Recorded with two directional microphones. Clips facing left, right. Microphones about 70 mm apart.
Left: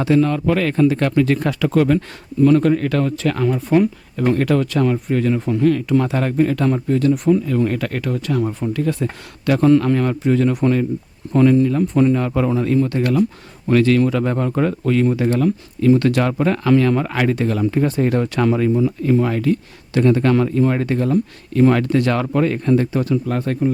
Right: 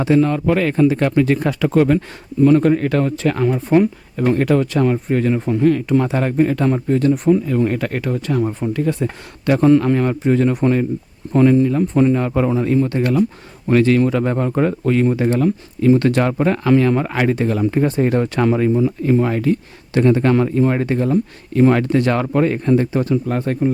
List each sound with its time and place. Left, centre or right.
0.0 s speech: right